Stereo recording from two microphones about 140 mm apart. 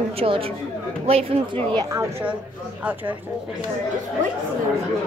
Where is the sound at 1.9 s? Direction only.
20° right (ahead or behind).